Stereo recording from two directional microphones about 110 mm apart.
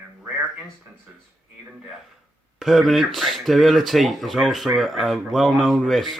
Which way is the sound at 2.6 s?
Centre (ahead or behind).